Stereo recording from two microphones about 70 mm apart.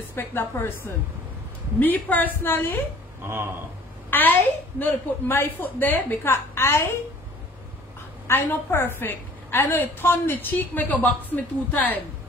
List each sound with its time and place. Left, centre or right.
0.1 s a woman's voice: left
4.1 s a woman's voice: left
8.3 s a woman's voice: left